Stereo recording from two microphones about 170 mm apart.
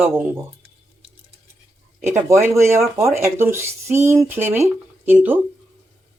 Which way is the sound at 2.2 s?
15° right (ahead or behind).